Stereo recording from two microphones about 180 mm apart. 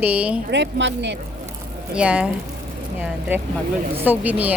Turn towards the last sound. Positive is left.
turn(degrees=-10)  # may be behind; listen again after turning